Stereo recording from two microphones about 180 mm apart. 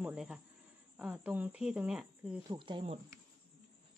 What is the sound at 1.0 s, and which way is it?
Cricket, 10° right (ahead or behind).